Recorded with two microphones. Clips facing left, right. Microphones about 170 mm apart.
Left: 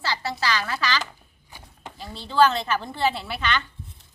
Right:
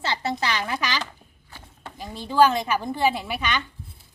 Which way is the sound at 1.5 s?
15° left (ahead or behind).